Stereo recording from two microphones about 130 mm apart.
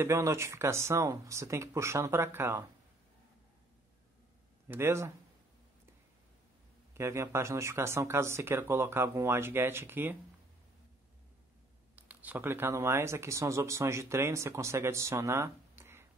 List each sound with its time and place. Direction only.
0.0 s speech: 20° right (ahead or behind)
4.6 s speech: 20° right (ahead or behind)
6.9 s speech: 20° right (ahead or behind)
11.9 s speech: 15° right (ahead or behind)